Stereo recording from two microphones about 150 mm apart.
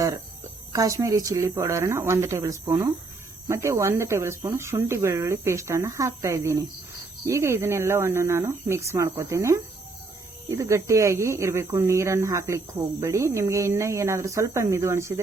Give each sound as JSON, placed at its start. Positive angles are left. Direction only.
{"t": 0.7, "sound": "speech", "side_deg": -20}